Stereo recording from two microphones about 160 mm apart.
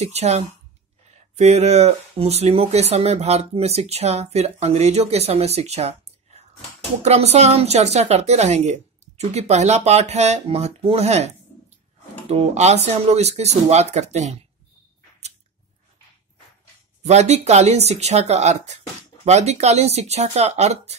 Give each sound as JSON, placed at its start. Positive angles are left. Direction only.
{"t": 0.0, "sound": "a woman's voice", "side_deg": -45}
{"t": 17.0, "sound": "a woman's voice", "side_deg": -45}